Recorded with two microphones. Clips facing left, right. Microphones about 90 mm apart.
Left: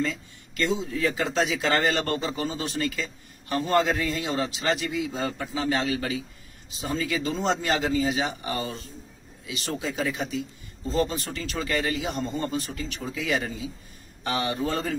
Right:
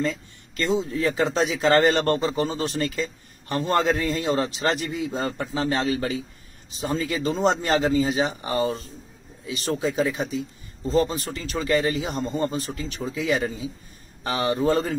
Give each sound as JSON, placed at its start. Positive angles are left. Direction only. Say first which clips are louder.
{"t": 0.0, "sound": "a man's voice", "louder": "right 2 dB", "side_deg": -40}